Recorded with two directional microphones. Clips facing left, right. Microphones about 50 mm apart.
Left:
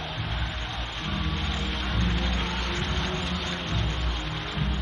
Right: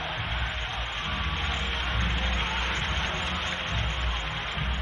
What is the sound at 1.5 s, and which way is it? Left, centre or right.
Music, right.